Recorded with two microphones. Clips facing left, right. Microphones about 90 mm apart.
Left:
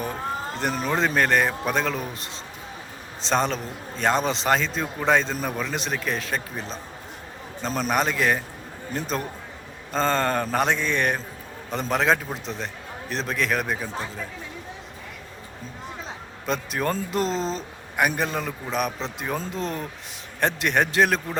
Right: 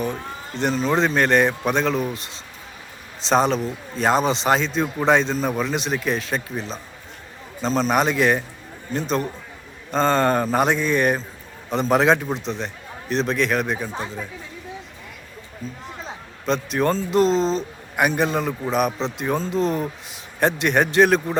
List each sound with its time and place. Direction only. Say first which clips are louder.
0.6 s a man's voice: right 5 dB; 5° left (ahead or behind)
16.5 s a man's voice: right 5 dB; 5° left (ahead or behind)